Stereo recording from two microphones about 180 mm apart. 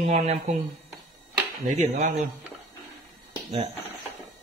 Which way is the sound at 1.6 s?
40° right (ahead or behind).